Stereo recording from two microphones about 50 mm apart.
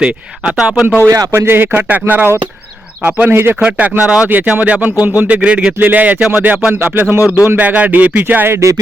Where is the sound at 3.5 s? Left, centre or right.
Right.